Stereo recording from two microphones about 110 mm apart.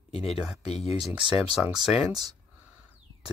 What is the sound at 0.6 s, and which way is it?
Speech, 65° left (ahead or behind).